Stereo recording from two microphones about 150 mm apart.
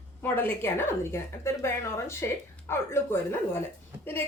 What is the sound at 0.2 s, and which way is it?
Speech, 15° left (ahead or behind).